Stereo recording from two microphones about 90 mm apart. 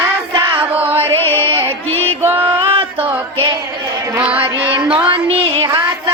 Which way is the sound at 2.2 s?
25° right (ahead or behind).